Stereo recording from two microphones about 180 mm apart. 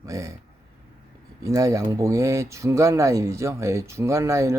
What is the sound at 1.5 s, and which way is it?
Speech, 15° right (ahead or behind).